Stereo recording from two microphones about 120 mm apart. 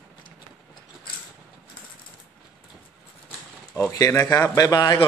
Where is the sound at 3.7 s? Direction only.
25° left (ahead or behind).